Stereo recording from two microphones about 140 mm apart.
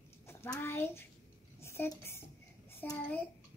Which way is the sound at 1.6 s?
20° left (ahead or behind).